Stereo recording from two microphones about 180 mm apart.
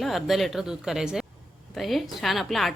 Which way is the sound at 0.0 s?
Centre (ahead or behind).